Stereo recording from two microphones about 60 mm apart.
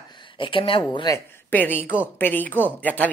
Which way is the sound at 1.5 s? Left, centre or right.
Left.